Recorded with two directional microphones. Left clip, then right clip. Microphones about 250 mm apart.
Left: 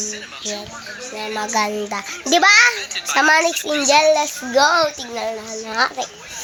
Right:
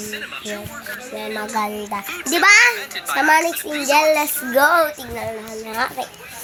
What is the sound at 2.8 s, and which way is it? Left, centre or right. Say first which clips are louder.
Speech: left 2 dB; right.